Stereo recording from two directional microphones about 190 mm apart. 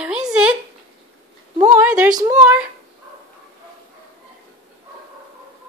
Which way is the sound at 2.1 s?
20° right (ahead or behind).